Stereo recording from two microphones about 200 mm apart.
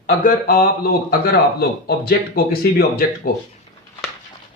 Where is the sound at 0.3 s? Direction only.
45° left (ahead or behind).